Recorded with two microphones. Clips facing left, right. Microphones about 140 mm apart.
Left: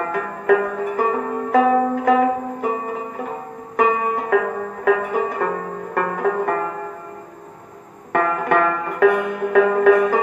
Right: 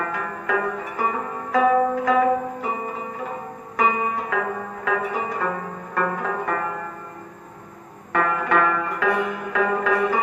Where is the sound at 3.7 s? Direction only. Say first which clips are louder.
Left 4 dB; 55° left (ahead or behind).